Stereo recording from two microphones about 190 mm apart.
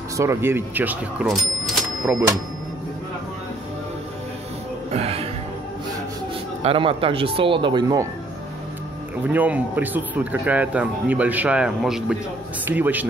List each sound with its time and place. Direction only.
0.2 s speech: 15° right (ahead or behind)
1.2 s cash register: centre (ahead or behind)
4.9 s speech: 30° right (ahead or behind)
6.6 s speech: 30° right (ahead or behind)
9.2 s speech: 10° right (ahead or behind)